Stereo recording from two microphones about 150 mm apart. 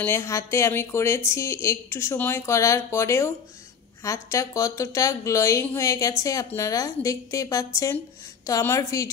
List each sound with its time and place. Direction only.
0.0 s a woman's voice: 20° left (ahead or behind)